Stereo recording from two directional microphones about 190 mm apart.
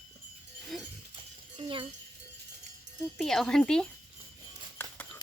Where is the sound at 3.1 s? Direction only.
Centre (ahead or behind).